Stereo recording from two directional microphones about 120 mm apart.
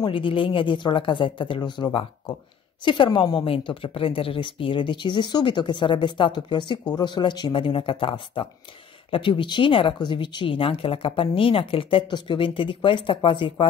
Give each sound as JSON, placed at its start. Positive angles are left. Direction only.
{"t": 0.0, "sound": "a woman's voice", "side_deg": 45}